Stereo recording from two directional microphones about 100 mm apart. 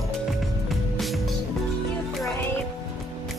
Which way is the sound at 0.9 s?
Centre (ahead or behind).